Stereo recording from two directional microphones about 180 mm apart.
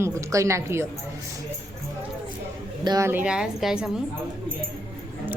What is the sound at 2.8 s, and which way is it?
A woman's voice, 20° right (ahead or behind).